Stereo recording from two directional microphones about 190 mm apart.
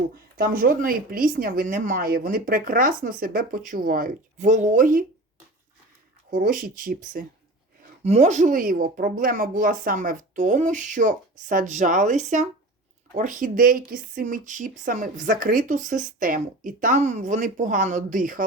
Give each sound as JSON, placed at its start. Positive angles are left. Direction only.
{"t": 0.3, "sound": "speech", "side_deg": -50}
{"t": 6.3, "sound": "speech", "side_deg": -45}